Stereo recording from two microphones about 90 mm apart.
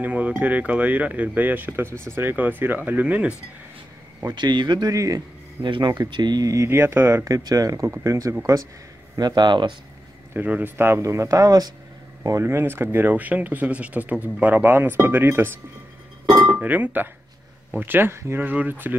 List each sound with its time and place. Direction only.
0.0 s speech: 15° right (ahead or behind)
4.4 s speech: 60° right (ahead or behind)
4.9 s speech: 40° right (ahead or behind)
5.6 s speech: 60° right (ahead or behind); by 7.2 s 25° right (ahead or behind)
7.2 s speech: 40° right (ahead or behind)
9.2 s speech: 55° right (ahead or behind)
10.3 s speech: 20° right (ahead or behind)